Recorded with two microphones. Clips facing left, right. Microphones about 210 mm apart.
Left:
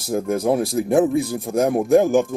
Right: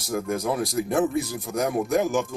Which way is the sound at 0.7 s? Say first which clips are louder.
Left 4 dB; 55° left (ahead or behind).